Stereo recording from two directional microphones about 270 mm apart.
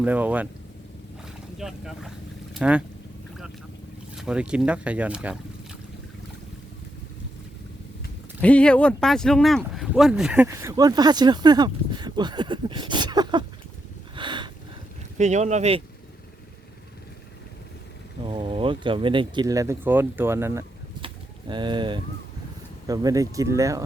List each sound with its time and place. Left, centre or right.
0.0 s speech: centre
1.5 s speech: centre
4.1 s speech: centre
8.4 s speech: centre
14.2 s a sound: centre
15.2 s speech: right
18.3 s speech: centre